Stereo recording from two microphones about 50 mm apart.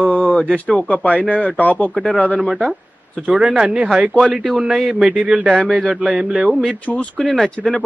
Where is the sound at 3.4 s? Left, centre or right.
Right.